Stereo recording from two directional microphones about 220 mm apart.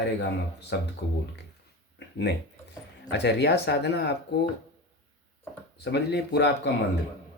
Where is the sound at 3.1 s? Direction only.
50° left (ahead or behind).